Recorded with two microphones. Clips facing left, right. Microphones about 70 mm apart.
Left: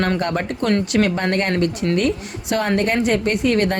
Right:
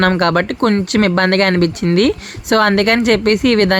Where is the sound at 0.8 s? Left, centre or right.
Right.